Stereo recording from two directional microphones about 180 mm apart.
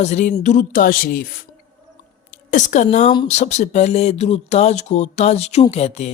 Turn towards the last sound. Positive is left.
turn(degrees=40)  # may be behind; listen again after turning